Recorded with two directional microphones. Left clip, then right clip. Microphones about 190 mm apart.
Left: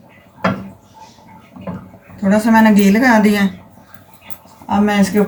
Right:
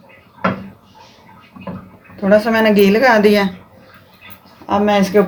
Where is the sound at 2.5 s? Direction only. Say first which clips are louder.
Even; 45° right (ahead or behind).